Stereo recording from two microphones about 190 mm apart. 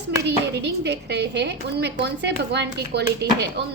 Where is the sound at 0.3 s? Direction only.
65° right (ahead or behind).